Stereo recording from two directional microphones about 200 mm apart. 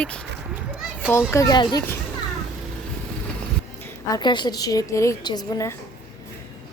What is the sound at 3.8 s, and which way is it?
A woman's voice, 15° left (ahead or behind).